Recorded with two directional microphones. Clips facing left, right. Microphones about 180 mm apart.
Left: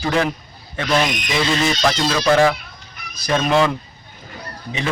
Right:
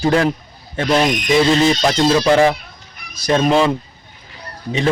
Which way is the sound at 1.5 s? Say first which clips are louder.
Right 4 dB; 25° right (ahead or behind).